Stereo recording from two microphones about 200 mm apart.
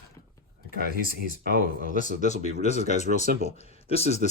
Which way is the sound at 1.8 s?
35° left (ahead or behind).